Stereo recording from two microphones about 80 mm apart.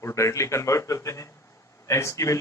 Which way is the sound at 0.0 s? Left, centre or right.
Left.